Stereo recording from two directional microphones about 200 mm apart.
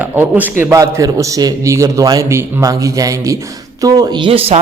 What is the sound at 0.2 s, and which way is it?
A man's voice, 10° right (ahead or behind).